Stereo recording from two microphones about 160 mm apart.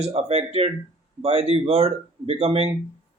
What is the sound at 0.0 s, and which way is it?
Speech, 40° right (ahead or behind).